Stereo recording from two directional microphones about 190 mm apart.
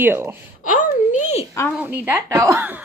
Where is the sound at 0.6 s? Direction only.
40° left (ahead or behind).